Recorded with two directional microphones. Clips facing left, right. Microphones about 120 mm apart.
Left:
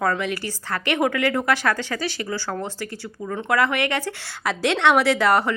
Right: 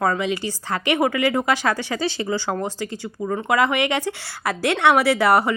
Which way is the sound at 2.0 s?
25° right (ahead or behind).